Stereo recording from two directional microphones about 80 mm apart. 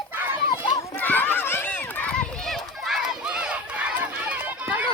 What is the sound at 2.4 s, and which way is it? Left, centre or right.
Run, centre.